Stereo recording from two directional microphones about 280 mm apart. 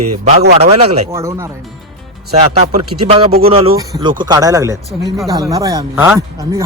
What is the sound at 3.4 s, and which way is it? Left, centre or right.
Speech, centre.